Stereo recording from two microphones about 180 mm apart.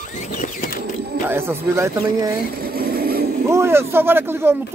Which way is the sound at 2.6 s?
55° right (ahead or behind).